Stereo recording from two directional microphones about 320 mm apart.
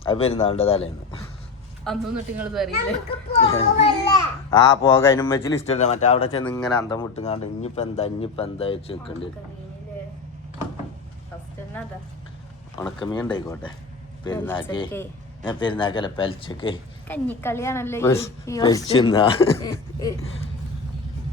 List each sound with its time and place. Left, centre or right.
0.0 s a man's voice: centre
1.9 s a child's voice: centre
3.3 s a child's voice: centre
5.6 s a man's voice: centre
6.6 s a child's voice: centre
6.9 s a woman's voice: centre
12.7 s a woman's voice: centre